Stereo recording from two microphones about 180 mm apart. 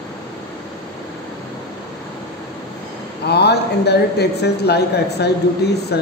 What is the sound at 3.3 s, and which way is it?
A woman's voice, 65° left (ahead or behind).